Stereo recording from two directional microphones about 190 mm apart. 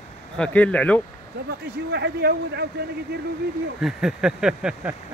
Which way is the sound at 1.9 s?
65° right (ahead or behind).